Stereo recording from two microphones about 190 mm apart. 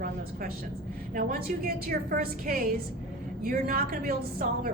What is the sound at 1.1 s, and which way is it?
A woman's voice, 50° right (ahead or behind).